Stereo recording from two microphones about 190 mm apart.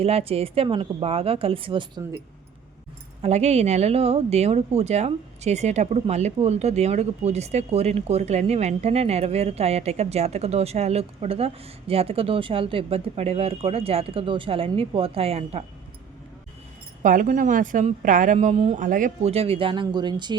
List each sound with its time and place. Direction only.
0.0 s speech: 30° right (ahead or behind)
3.2 s speech: 35° right (ahead or behind)
17.0 s speech: 45° right (ahead or behind); by 20.3 s 25° right (ahead or behind)